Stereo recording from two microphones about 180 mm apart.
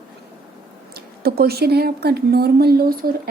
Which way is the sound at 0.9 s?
60° right (ahead or behind).